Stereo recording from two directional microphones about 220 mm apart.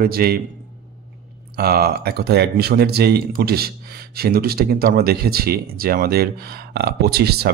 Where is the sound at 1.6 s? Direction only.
45° right (ahead or behind).